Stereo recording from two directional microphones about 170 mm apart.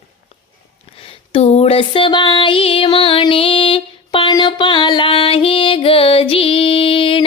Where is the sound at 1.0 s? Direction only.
35° left (ahead or behind).